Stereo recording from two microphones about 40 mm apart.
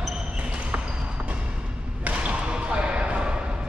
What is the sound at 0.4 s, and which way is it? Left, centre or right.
Basketball bounce, right.